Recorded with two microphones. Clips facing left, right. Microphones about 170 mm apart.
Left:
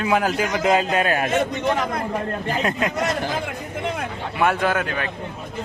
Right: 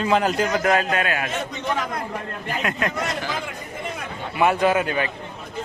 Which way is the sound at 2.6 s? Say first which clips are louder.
Left 2 dB; 30° left (ahead or behind).